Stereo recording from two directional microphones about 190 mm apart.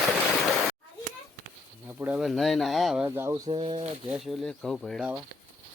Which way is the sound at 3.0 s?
10° right (ahead or behind).